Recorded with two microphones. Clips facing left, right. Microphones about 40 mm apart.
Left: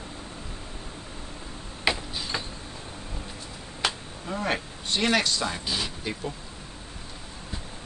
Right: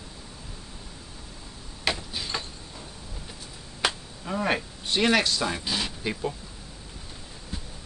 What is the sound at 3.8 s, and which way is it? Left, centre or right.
Speech, centre.